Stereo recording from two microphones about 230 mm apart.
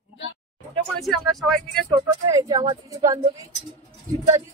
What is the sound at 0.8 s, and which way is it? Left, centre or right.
Speech, centre.